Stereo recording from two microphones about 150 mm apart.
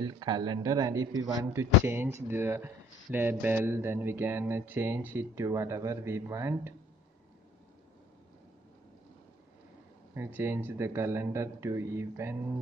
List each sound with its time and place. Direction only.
0.0 s speech: 25° right (ahead or behind)
10.1 s speech: 15° right (ahead or behind)